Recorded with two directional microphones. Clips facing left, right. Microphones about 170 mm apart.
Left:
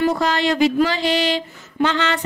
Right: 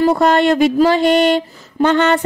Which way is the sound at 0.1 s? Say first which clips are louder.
Right 7 dB; 55° right (ahead or behind).